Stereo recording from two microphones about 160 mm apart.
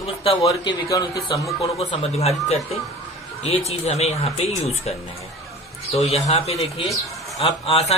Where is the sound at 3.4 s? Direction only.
40° left (ahead or behind).